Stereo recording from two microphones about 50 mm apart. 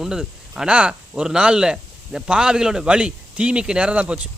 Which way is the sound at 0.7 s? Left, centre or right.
Right.